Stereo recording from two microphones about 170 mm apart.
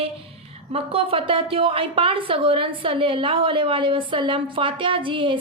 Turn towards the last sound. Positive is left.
turn(degrees=-30)  # may be behind; listen again after turning